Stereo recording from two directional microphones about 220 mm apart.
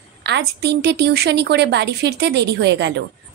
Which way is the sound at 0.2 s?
50° right (ahead or behind).